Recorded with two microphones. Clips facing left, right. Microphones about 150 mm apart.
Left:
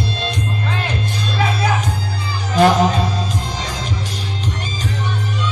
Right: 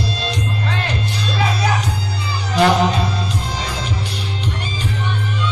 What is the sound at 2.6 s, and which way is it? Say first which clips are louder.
Music: left 2 dB; 45° left (ahead or behind).